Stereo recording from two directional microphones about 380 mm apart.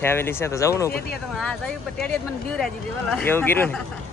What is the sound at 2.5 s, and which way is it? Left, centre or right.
Speech, centre.